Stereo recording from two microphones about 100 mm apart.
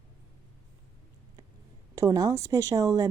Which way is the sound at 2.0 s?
35° right (ahead or behind).